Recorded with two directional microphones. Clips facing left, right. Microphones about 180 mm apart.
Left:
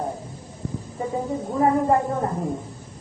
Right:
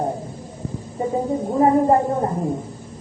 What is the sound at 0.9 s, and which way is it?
A woman's voice, 25° right (ahead or behind).